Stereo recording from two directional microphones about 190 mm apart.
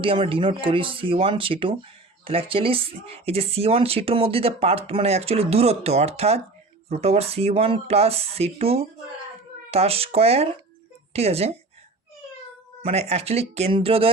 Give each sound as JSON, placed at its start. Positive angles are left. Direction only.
{"t": 0.0, "sound": "speech", "side_deg": -30}
{"t": 12.8, "sound": "speech", "side_deg": -35}